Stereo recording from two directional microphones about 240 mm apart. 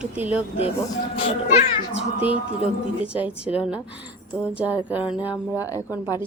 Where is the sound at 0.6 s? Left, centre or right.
Left.